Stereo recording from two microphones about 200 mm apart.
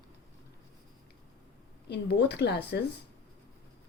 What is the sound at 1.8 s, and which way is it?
Speech, 55° left (ahead or behind).